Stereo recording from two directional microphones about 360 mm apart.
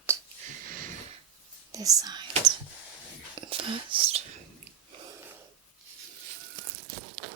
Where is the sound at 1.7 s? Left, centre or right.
Centre.